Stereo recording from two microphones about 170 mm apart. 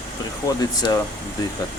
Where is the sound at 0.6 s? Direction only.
25° left (ahead or behind).